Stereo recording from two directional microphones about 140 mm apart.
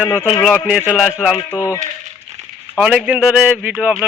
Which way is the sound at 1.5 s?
20° left (ahead or behind).